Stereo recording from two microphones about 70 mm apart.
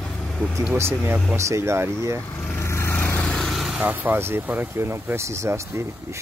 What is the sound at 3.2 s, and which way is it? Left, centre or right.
Vehicle, centre.